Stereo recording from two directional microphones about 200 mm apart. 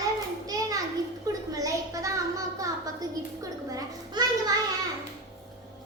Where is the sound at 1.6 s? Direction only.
15° right (ahead or behind).